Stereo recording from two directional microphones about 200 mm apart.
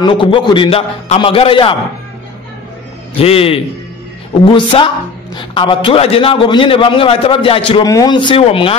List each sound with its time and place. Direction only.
0.0 s a woman's voice: 25° left (ahead or behind)
3.2 s a woman's voice: 30° left (ahead or behind)